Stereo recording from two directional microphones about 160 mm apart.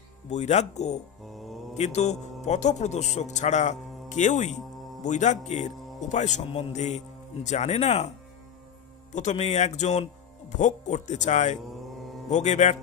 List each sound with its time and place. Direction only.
0.3 s speech: 45° left (ahead or behind)
1.2 s mantra: centre (ahead or behind)
1.7 s a man's voice: 45° left (ahead or behind)
9.1 s speech: 50° left (ahead or behind)